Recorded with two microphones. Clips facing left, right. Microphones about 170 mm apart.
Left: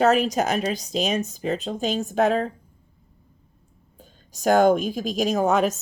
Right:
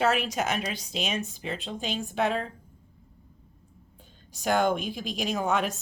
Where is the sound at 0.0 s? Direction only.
40° left (ahead or behind).